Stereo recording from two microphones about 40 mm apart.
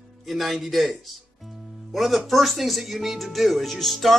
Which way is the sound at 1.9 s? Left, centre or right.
Centre.